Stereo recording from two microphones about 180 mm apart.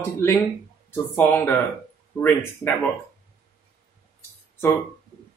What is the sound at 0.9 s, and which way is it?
Speech, 10° left (ahead or behind).